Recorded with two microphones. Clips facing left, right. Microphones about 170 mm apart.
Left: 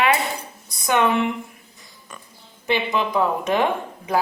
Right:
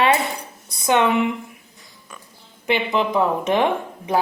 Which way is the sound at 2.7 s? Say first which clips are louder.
Right 2 dB; 20° right (ahead or behind).